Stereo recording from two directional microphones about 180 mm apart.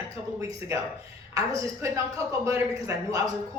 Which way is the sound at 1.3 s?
15° right (ahead or behind).